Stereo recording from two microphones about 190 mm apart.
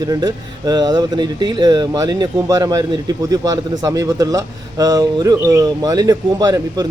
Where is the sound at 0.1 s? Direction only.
20° right (ahead or behind).